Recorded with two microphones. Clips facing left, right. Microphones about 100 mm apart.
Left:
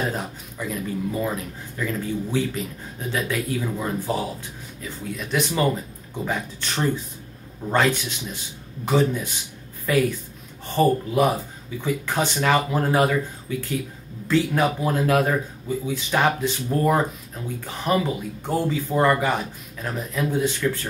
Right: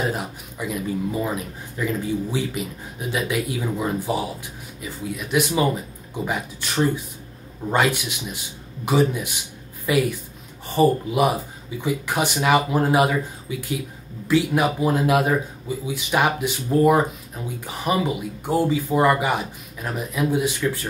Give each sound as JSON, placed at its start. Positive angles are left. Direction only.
{"t": 0.0, "sound": "speech", "side_deg": -10}